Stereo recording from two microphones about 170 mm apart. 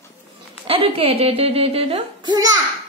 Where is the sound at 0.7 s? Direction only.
35° right (ahead or behind).